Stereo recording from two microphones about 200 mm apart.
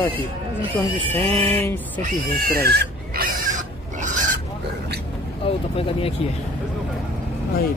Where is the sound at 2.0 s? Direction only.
45° right (ahead or behind).